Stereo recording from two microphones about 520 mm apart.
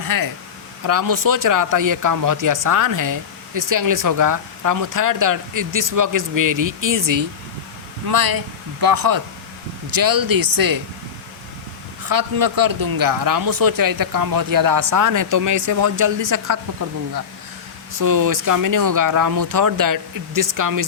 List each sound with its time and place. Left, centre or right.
0.0 s speech: right
12.0 s speech: right
17.9 s speech: right